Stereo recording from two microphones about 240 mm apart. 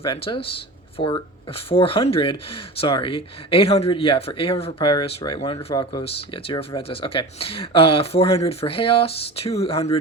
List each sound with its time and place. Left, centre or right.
0.0 s speech: left